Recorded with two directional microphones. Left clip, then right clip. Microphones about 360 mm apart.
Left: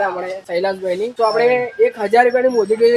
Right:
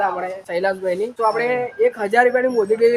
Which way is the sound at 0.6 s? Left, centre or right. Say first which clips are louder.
Left 1 dB; centre.